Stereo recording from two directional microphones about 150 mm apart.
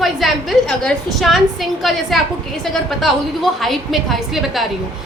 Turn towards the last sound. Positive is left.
turn(degrees=0)  # may be behind; listen again after turning